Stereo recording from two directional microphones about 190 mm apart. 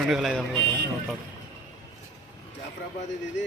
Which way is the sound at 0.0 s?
Centre (ahead or behind).